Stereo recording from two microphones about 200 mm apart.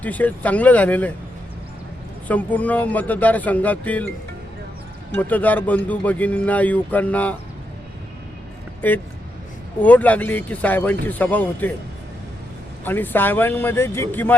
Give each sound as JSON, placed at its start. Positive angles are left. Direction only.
{"t": 0.0, "sound": "speech", "side_deg": 10}
{"t": 2.2, "sound": "speech", "side_deg": 10}
{"t": 5.1, "sound": "speech", "side_deg": 10}
{"t": 8.8, "sound": "speech", "side_deg": 10}
{"t": 12.8, "sound": "speech", "side_deg": 10}